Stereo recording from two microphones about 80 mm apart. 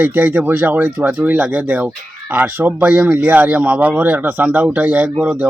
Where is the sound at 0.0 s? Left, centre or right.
Right.